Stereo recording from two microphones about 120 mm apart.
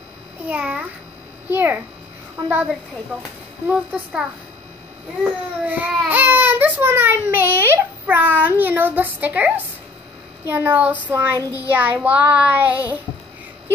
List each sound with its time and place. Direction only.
0.5 s child singing: 10° right (ahead or behind)
3.6 s child singing: 10° right (ahead or behind)
5.2 s baby cry: 15° right (ahead or behind)
10.4 s child singing: 20° right (ahead or behind)